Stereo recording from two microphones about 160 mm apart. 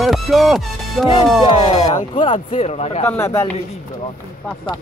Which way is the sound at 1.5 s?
30° left (ahead or behind).